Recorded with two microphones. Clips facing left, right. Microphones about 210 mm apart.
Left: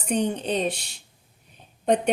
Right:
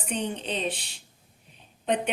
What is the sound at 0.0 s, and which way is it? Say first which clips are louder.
A woman's voice: left 6 dB; 40° left (ahead or behind).